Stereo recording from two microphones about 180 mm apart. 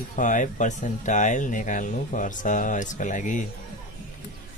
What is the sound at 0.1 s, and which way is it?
Speech, 45° left (ahead or behind).